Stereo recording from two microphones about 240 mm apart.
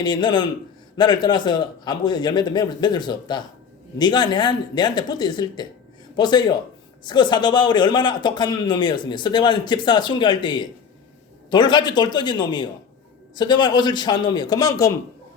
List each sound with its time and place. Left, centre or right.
0.0 s a man's voice: centre